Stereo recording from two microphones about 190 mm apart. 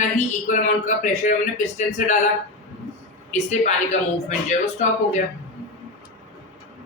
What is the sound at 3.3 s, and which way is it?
A man's voice, 40° left (ahead or behind).